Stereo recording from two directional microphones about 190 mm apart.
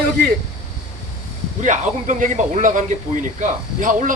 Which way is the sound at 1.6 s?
40° right (ahead or behind).